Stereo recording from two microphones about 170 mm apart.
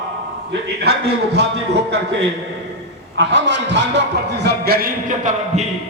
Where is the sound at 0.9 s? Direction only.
80° right.